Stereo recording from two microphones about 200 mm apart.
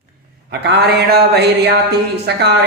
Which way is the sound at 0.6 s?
55° right (ahead or behind).